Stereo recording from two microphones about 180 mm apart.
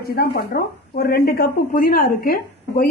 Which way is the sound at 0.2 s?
60° left (ahead or behind).